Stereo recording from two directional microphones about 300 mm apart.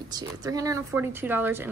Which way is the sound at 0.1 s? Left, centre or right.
Centre.